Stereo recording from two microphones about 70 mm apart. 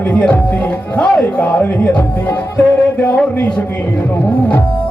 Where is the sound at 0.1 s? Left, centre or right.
Left.